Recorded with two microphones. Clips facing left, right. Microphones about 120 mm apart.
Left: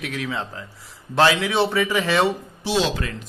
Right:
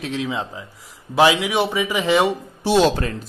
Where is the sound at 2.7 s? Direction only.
50° right (ahead or behind).